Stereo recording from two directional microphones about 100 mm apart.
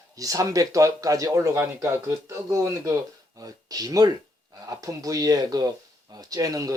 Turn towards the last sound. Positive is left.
turn(degrees=-35)  # may be behind; listen again after turning